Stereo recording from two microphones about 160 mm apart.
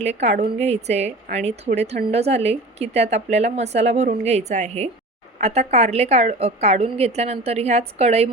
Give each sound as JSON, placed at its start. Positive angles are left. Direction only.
{"t": 0.0, "sound": "a woman's voice", "side_deg": -45}